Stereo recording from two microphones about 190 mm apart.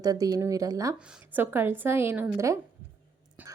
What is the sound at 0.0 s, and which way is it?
Speech, 20° right (ahead or behind).